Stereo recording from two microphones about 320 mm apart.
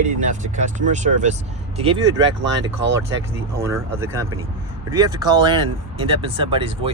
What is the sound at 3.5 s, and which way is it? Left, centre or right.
Speech, centre.